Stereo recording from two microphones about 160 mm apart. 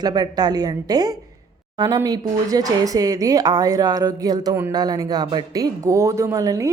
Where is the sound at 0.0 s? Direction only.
25° right (ahead or behind).